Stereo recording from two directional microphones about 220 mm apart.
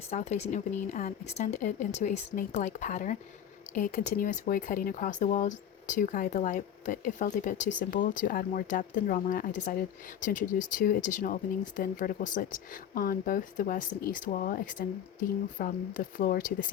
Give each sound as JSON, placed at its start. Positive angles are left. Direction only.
{"t": 0.1, "sound": "speech", "side_deg": 30}